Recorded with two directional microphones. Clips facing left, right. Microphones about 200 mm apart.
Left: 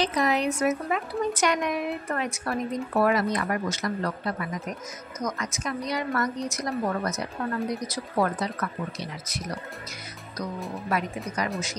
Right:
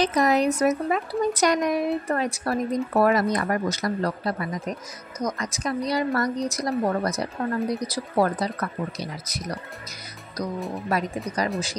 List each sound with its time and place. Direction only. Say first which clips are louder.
0.0 s speech: right 4 dB; 40° right (ahead or behind)
10.7 s speech: right 3 dB; 35° right (ahead or behind)